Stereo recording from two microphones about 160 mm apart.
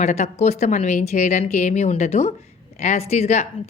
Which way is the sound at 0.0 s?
45° left (ahead or behind).